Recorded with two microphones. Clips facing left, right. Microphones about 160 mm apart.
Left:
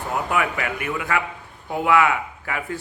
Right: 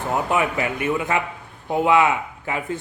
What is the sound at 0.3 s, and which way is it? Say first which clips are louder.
Speech: right 2 dB; 25° right (ahead or behind).